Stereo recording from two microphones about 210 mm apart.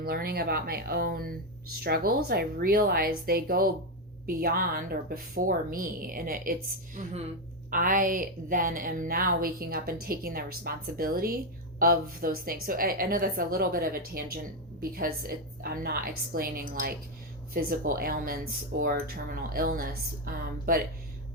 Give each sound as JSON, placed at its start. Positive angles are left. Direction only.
{"t": 0.0, "sound": "a woman's voice", "side_deg": -45}